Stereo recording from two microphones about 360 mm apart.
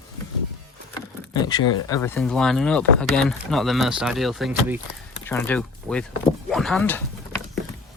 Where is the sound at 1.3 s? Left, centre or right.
Centre.